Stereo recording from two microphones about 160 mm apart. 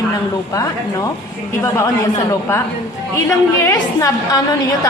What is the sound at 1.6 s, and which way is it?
A woman's voice, 20° left (ahead or behind).